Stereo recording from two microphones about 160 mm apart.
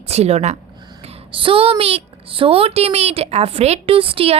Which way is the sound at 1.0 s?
35° right (ahead or behind).